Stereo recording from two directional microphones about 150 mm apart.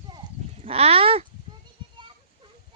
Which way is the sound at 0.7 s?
40° right (ahead or behind).